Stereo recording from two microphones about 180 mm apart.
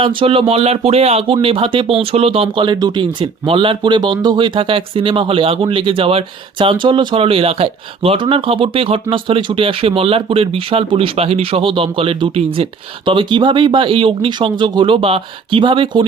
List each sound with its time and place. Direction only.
0.0 s speech: 30° right (ahead or behind)